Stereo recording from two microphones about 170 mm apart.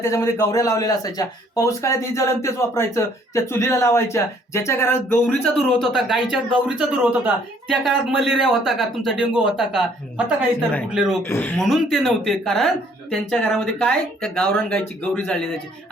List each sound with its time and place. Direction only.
0.0 s a man's voice: 15° left (ahead or behind)
5.4 s speech: centre (ahead or behind)
11.2 s speech: 15° left (ahead or behind)